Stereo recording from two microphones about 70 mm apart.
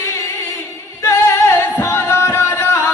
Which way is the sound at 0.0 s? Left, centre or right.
Left.